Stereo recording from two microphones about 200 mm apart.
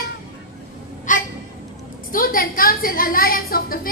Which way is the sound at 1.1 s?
40° left (ahead or behind).